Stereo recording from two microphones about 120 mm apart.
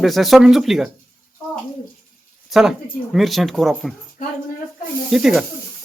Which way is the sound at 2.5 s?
5° right (ahead or behind).